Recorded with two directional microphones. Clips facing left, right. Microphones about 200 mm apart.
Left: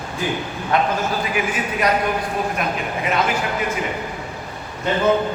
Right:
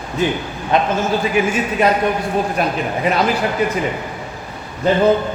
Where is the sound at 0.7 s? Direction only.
20° right (ahead or behind).